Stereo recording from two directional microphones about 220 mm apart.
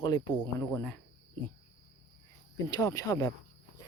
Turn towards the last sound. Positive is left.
turn(degrees=15)  # may be behind; listen again after turning